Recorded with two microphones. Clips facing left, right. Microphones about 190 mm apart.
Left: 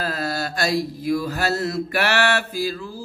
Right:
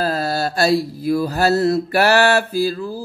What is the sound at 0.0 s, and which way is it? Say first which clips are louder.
Mantra: right 5 dB; 35° right (ahead or behind).